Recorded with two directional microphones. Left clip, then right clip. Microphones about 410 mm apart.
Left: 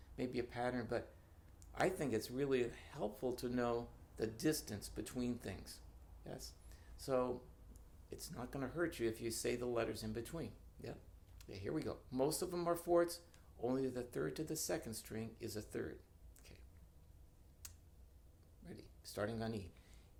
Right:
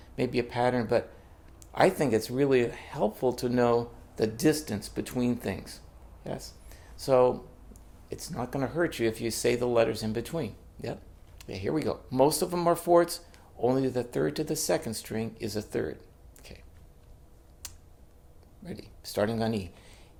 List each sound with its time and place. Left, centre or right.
0.2 s speech: right
16.5 s a sound: centre
17.6 s tick: centre
18.6 s speech: centre